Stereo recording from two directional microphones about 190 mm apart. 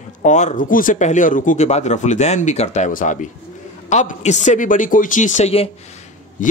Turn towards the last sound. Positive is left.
turn(degrees=45)  # may be behind; listen again after turning